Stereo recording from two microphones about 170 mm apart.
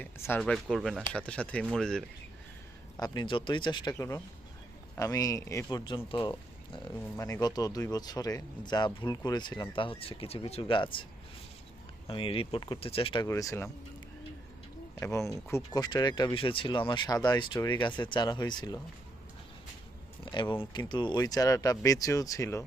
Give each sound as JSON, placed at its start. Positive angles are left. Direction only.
{"t": 0.0, "sound": "speech", "side_deg": 10}
{"t": 3.0, "sound": "speech", "side_deg": 25}
{"t": 5.7, "sound": "speech", "side_deg": 30}
{"t": 7.4, "sound": "speech", "side_deg": 25}
{"t": 12.0, "sound": "speech", "side_deg": 30}
{"t": 13.2, "sound": "speech", "side_deg": 20}
{"t": 14.9, "sound": "speech", "side_deg": 15}
{"t": 20.2, "sound": "speech", "side_deg": 30}